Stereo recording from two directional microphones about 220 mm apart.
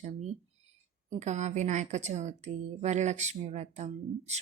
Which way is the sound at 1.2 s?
30° right (ahead or behind).